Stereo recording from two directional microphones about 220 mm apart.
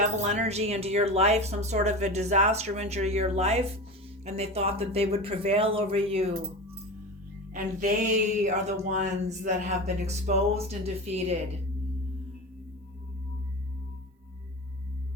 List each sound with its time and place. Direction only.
0.0 s speech: 30° right (ahead or behind)
7.5 s a sound: 35° right (ahead or behind)
9.0 s speech: 30° right (ahead or behind)